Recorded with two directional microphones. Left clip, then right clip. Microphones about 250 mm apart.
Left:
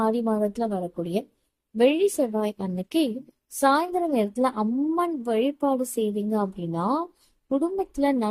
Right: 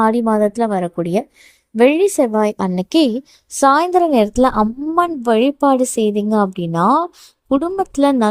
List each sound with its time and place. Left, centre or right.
0.0 s a woman's voice: right